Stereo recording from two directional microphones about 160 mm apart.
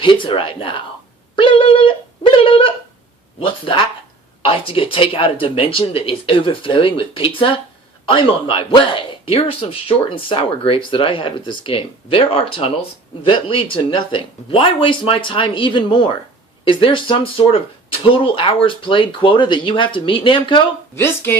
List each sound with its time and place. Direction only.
0.0 s speech: 30° left (ahead or behind)
1.4 s a sound: 35° left (ahead or behind)
3.4 s speech: 30° left (ahead or behind)
20.9 s speech: 15° left (ahead or behind)